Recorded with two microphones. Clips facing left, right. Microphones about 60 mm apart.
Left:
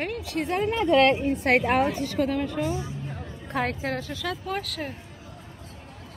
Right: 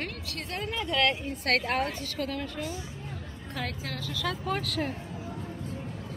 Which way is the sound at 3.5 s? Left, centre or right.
Left.